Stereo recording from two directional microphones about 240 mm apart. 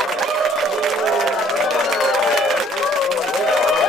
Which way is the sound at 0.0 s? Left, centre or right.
Centre.